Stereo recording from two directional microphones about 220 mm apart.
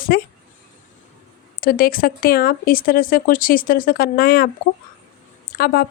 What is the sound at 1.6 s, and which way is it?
Speech, 40° left (ahead or behind).